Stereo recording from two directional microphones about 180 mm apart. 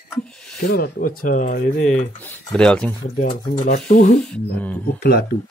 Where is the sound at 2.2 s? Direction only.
5° left (ahead or behind).